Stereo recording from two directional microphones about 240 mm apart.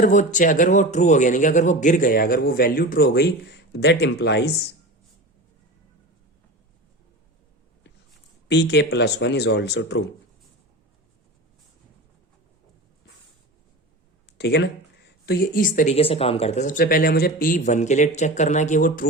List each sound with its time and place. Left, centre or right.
0.0 s speech: left
8.4 s speech: left
14.3 s speech: left